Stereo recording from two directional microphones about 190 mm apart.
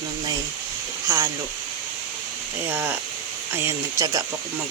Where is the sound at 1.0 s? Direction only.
15° right (ahead or behind).